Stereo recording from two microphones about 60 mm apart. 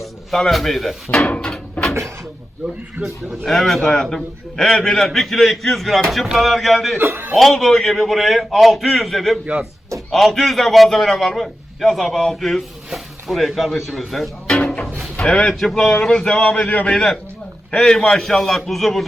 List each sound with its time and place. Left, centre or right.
0.0 s speech: centre
1.2 s a sound: centre
3.0 s a man's voice: centre
7.0 s a man's voice: right
7.3 s a man's voice: centre
14.4 s music: centre
15.1 s a man's voice: centre
16.5 s a man's voice: left
16.9 s a man's voice: centre